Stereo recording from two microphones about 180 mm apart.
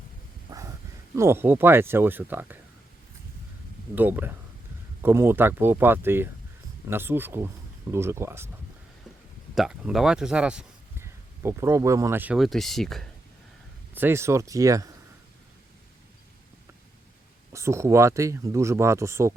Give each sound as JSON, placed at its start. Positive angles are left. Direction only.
{"t": 0.5, "sound": "a sound", "side_deg": -20}
{"t": 1.1, "sound": "speech", "side_deg": -15}
{"t": 3.9, "sound": "speech", "side_deg": -10}
{"t": 9.6, "sound": "speech", "side_deg": 0}
{"t": 11.0, "sound": "speech", "side_deg": -15}
{"t": 13.9, "sound": "speech", "side_deg": -10}
{"t": 17.5, "sound": "speech", "side_deg": -15}